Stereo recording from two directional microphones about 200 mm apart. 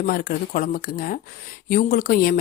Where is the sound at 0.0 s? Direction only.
45° left (ahead or behind).